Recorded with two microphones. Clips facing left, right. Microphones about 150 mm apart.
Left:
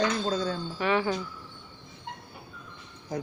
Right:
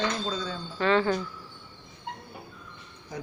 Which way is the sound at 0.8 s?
15° left (ahead or behind).